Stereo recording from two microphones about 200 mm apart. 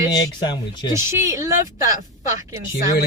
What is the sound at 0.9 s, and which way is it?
Speech, 15° right (ahead or behind).